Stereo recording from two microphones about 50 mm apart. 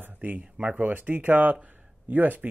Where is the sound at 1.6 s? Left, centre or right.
Right.